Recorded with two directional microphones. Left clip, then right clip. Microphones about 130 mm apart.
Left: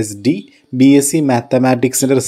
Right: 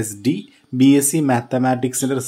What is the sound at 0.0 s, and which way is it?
Speech, 20° left (ahead or behind).